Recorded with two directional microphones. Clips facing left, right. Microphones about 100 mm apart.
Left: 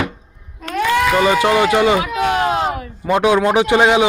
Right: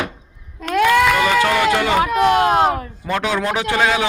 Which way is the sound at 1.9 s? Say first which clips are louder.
Right 3 dB; 55° right (ahead or behind).